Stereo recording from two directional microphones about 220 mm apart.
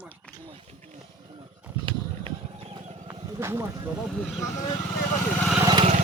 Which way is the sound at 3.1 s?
10° right (ahead or behind).